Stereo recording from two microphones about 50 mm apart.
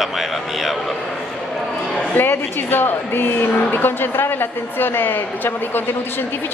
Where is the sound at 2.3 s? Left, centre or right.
Left.